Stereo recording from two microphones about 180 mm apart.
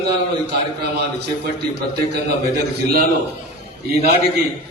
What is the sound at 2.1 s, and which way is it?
Speech, 65° right (ahead or behind).